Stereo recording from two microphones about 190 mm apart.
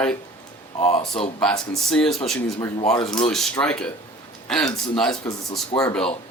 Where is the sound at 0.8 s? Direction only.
35° left (ahead or behind).